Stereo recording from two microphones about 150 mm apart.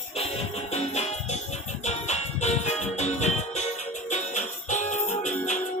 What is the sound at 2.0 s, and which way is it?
Music, 50° left (ahead or behind).